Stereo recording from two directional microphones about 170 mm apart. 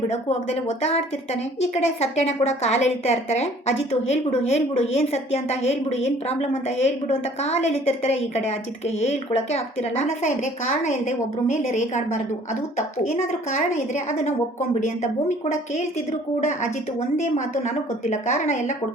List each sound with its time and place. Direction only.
0.1 s a woman's voice: 35° left (ahead or behind)
9.0 s a woman's voice: 40° left (ahead or behind)
17.2 s a woman's voice: 45° left (ahead or behind)